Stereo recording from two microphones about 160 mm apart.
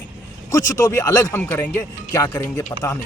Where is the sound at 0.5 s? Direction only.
20° left (ahead or behind).